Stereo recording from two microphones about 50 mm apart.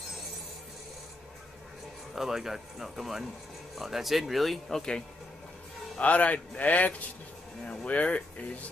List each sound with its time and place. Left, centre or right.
2.1 s speech: centre
5.9 s a man's voice: left